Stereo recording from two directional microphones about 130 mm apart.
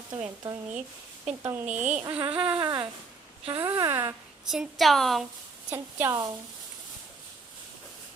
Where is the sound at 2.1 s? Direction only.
40° right (ahead or behind).